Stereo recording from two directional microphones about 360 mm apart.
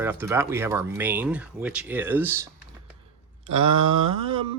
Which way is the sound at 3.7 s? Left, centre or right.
Right.